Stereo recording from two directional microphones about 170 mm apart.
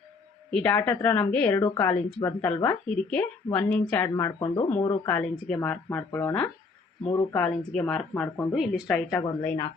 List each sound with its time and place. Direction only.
0.5 s speech: 10° left (ahead or behind)
4.8 s a woman's voice: 15° left (ahead or behind)